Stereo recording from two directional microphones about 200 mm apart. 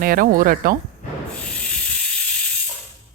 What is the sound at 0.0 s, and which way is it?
Speech, 45° right (ahead or behind).